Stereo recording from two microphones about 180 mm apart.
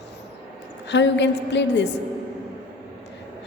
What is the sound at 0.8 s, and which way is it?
A woman's voice, 75° left (ahead or behind).